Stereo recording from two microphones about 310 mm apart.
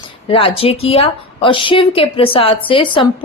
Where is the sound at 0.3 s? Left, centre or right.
Centre.